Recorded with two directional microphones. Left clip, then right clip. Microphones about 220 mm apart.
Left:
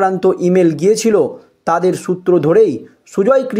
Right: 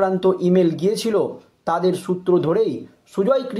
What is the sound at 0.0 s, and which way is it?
Speech, 40° left (ahead or behind).